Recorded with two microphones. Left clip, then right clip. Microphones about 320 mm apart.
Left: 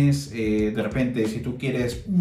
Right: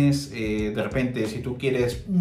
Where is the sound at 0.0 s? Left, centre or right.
Centre.